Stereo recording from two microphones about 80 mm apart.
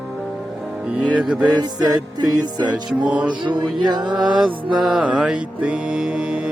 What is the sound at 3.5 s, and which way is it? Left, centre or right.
Music, right.